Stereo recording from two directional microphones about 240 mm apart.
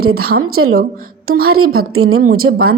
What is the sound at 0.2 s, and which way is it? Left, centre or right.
Speech, right.